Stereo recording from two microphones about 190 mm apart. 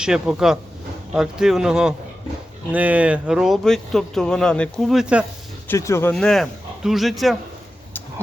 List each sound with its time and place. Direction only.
0.0 s speech: 5° right (ahead or behind)
5.6 s speech: 15° left (ahead or behind)